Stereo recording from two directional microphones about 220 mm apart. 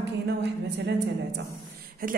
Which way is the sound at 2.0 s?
40° right (ahead or behind).